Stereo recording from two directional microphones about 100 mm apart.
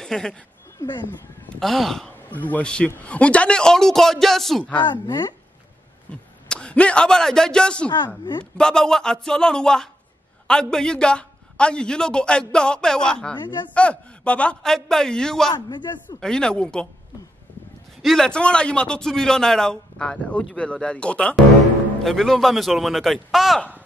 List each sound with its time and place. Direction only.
0.0 s speech: 5° left (ahead or behind)
1.6 s a man's voice: 5° left (ahead or behind)
2.3 s a man's voice: 15° left (ahead or behind)
4.8 s speech: 50° left (ahead or behind)
6.5 s a man's voice: 10° left (ahead or behind)
8.2 s speech: 50° left (ahead or behind)
8.5 s a man's voice: 5° left (ahead or behind)
13.4 s speech: 50° left (ahead or behind)
13.7 s a man's voice: 10° left (ahead or behind)
15.5 s speech: 45° left (ahead or behind)
16.2 s a man's voice: 5° left (ahead or behind)
18.0 s a man's voice: 5° left (ahead or behind)